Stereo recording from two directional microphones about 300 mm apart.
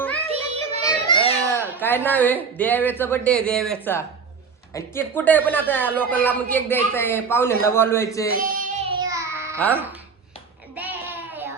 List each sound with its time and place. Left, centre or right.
0.3 s music: right
0.9 s children playing: centre
1.8 s speech: centre
8.4 s child singing: right; by 9.6 s centre
9.7 s chopping: centre
10.8 s a sound: centre